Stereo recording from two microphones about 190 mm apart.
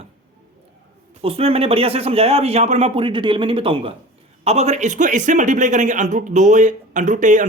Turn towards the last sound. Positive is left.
turn(degrees=-40)  # may be behind; listen again after turning